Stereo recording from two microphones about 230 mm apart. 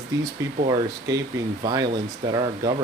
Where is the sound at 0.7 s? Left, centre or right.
Centre.